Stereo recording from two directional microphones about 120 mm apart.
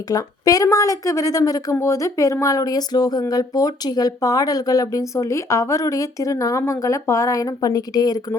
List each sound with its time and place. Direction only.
0.1 s a woman's voice: 30° left (ahead or behind)